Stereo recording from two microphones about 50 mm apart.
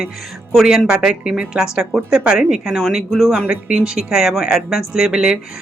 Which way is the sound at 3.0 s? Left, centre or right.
Centre.